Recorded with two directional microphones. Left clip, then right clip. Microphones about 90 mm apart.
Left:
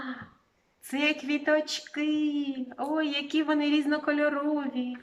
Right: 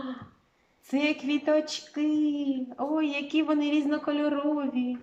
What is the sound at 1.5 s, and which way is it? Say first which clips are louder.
Speech: even; 35° right (ahead or behind).